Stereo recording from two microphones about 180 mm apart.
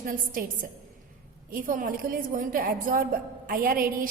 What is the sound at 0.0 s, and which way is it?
A woman's voice, 50° right (ahead or behind).